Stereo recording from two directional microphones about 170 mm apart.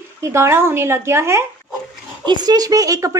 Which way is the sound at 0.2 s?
15° right (ahead or behind).